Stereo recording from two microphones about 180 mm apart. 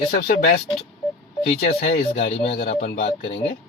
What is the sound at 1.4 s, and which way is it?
Speech, 40° left (ahead or behind).